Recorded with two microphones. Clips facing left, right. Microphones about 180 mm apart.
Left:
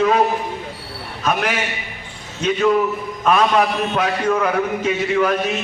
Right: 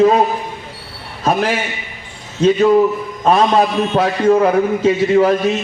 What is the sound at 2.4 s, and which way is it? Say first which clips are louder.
A man's voice: right 6 dB; 30° right (ahead or behind).